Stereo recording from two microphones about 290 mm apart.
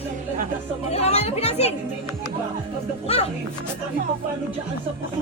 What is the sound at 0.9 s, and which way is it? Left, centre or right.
Speech, left.